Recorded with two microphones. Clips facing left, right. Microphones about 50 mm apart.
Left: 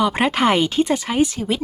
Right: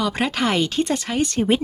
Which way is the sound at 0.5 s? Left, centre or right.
Centre.